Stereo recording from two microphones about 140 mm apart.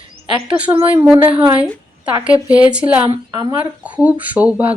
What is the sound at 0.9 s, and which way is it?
Speech, 15° right (ahead or behind).